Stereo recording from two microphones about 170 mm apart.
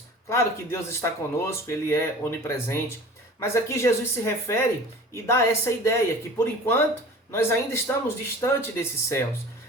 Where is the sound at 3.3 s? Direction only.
15° left (ahead or behind).